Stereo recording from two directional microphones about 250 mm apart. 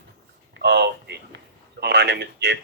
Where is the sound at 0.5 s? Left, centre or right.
Right.